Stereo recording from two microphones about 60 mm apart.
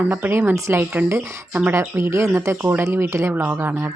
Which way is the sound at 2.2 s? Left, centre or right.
Right.